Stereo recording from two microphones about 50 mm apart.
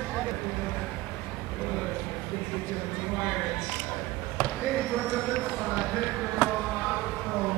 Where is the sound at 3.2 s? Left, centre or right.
Centre.